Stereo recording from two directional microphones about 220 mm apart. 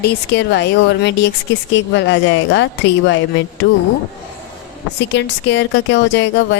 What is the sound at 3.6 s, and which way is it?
Speech, 55° left (ahead or behind).